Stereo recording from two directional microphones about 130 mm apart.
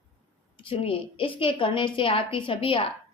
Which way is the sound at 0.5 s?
45° left (ahead or behind).